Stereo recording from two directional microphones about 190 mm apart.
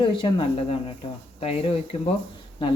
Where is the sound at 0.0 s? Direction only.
25° left (ahead or behind).